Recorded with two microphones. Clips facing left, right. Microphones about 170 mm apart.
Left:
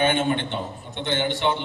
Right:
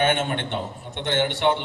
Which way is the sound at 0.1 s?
60° right (ahead or behind).